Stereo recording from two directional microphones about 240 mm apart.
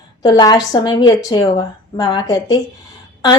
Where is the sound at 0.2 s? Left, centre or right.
Centre.